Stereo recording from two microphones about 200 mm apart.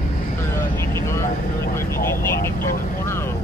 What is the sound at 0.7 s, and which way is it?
Vehicle, 15° left (ahead or behind).